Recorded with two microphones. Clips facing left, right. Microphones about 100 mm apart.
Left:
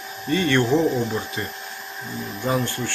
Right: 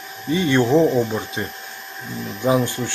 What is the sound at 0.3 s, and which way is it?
Speech, 15° right (ahead or behind).